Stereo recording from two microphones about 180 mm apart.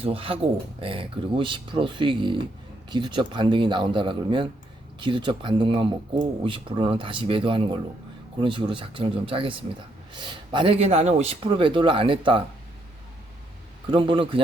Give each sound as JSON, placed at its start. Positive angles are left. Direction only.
{"t": 0.0, "sound": "a man's voice", "side_deg": -30}
{"t": 13.9, "sound": "a man's voice", "side_deg": -30}